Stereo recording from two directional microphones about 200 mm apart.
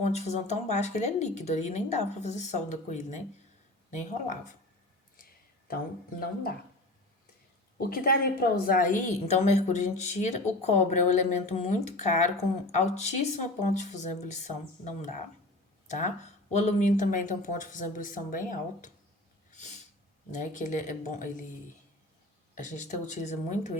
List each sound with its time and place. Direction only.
0.0 s a woman's voice: 35° left (ahead or behind)
5.6 s speech: 50° left (ahead or behind)
7.8 s a woman's voice: 50° left (ahead or behind)
19.5 s snort: 35° left (ahead or behind)
20.3 s a woman's voice: 40° left (ahead or behind)
22.5 s a woman's voice: 40° left (ahead or behind)